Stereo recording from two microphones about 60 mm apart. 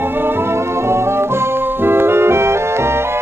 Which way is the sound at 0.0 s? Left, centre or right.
Right.